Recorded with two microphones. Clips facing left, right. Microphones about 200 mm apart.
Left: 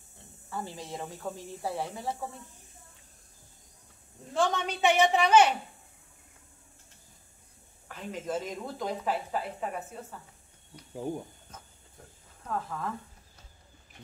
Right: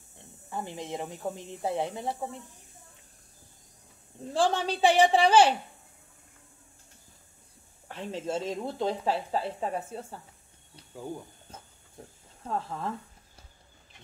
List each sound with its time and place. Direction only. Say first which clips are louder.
0.5 s speech: right 3 dB; 20° right (ahead or behind)
4.3 s a woman's voice: right 2 dB; 30° right (ahead or behind)
7.9 s speech: right 2 dB; 30° right (ahead or behind)
11.5 s hiss: right 2 dB; 30° right (ahead or behind)
12.4 s speech: right 1 dB; 30° right (ahead or behind)